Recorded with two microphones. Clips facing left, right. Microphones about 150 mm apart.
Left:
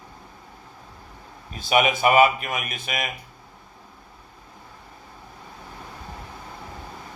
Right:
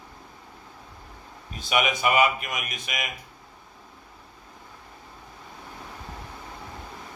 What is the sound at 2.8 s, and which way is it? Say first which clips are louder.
Speech: left 4 dB; 35° left (ahead or behind).